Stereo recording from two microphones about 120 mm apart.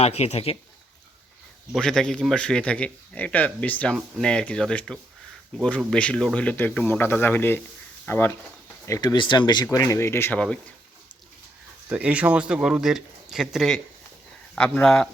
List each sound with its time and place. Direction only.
0.0 s speech: 60° left (ahead or behind)
1.7 s a man's voice: 5° left (ahead or behind); by 9.1 s 25° left (ahead or behind)
9.1 s speech: 40° left (ahead or behind)
9.7 s speech: 25° left (ahead or behind)
11.9 s speech: 10° right (ahead or behind); by 15.1 s 5° left (ahead or behind)